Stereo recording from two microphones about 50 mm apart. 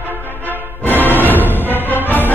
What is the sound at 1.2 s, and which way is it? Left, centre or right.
Music, left.